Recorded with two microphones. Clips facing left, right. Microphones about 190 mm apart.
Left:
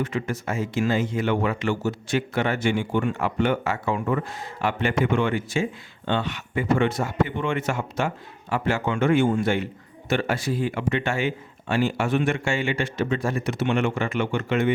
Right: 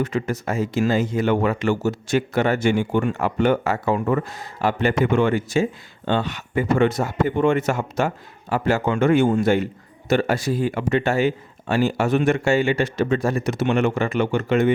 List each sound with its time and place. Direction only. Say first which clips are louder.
0.0 s speech: right 4 dB; 40° right (ahead or behind)